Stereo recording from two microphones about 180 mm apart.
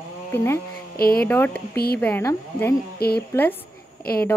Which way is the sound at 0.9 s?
55° left (ahead or behind).